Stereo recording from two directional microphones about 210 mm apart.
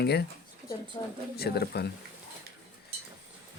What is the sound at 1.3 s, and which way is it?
Speech, 50° left (ahead or behind).